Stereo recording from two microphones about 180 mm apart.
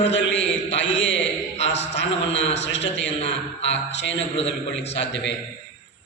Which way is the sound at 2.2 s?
90° left.